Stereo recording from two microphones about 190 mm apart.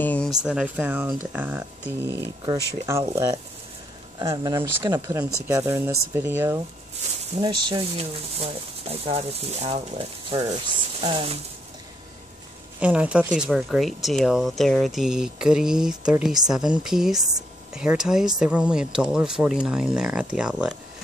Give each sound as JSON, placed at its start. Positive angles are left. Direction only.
{"t": 0.0, "sound": "a sound", "side_deg": 10}
{"t": 0.3, "sound": "speech", "side_deg": -5}
{"t": 7.3, "sound": "speech", "side_deg": -25}
{"t": 12.8, "sound": "speech", "side_deg": -5}